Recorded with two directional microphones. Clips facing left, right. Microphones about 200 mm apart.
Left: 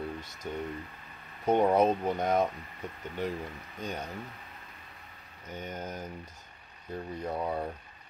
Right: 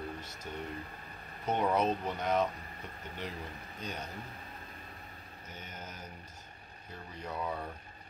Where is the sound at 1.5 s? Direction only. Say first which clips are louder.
Left 6 dB; 50° left (ahead or behind).